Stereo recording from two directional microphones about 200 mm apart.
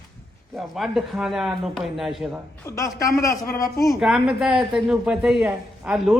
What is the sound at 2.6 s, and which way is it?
A man's voice, 15° left (ahead or behind).